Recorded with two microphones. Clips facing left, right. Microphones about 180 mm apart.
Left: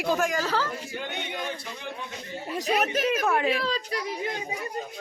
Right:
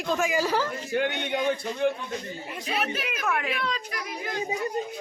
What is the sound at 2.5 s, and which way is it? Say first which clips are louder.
A child's voice: left 5 dB; 40° left (ahead or behind).